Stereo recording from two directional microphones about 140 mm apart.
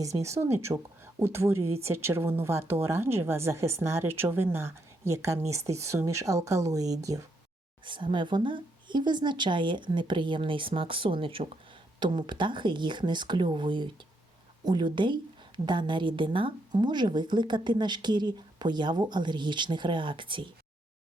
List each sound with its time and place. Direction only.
0.0 s speech: 20° right (ahead or behind)
7.9 s a woman's voice: 35° right (ahead or behind)